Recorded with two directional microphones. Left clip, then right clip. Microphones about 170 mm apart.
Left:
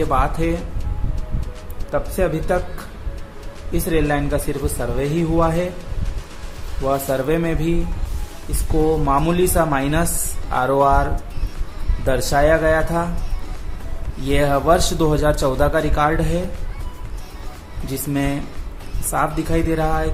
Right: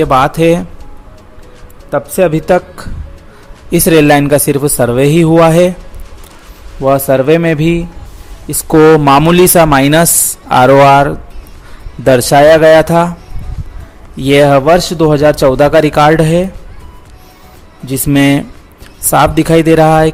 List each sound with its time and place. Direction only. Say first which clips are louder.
0.0 s a man's voice: right 12 dB; 50° right (ahead or behind)
1.9 s a man's voice: right 10 dB; 45° right (ahead or behind)
3.7 s speech: right 14 dB; 60° right (ahead or behind)
6.8 s a man's voice: right 11 dB; 45° right (ahead or behind)
9.0 s a man's voice: right 12 dB; 55° right (ahead or behind)
14.3 s a man's voice: right 10 dB; 50° right (ahead or behind)
17.8 s a man's voice: right 13 dB; 55° right (ahead or behind)